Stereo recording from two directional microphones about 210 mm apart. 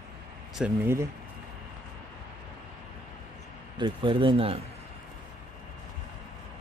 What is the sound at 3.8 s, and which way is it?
Speech, 25° right (ahead or behind).